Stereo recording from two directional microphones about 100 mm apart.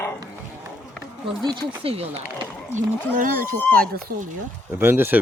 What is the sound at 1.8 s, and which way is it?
Speech, 80° right.